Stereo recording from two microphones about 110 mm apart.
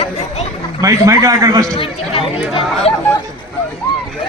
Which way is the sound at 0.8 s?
30° right (ahead or behind).